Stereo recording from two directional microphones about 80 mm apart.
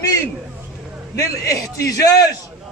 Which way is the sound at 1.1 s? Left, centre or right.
Left.